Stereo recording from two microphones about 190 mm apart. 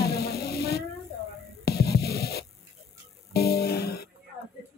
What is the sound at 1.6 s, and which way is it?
Music, 55° left (ahead or behind).